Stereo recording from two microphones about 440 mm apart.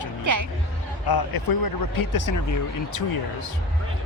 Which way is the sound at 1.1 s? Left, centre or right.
Left.